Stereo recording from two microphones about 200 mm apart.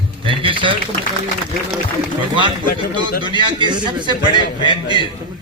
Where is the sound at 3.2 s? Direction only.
20° right (ahead or behind).